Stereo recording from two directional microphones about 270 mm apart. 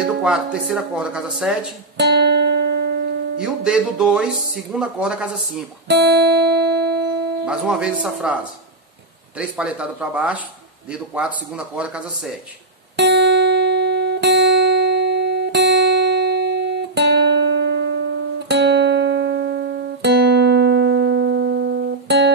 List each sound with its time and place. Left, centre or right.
0.0 s speech: centre
2.0 s music: right
3.3 s speech: centre
5.9 s music: right
7.4 s speech: centre
9.4 s speech: centre
12.9 s music: right